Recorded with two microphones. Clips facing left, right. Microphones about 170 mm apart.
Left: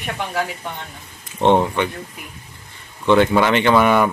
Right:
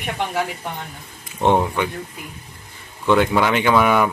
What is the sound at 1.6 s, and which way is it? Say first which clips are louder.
Mantra: left 2 dB; 5° right (ahead or behind).